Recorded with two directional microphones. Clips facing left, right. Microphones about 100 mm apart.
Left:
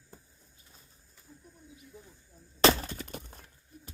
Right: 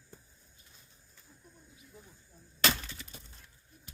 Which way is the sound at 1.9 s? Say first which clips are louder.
Left 2 dB; 5° left (ahead or behind).